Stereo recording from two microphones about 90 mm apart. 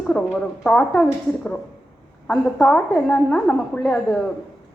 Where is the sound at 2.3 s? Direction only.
5° left (ahead or behind).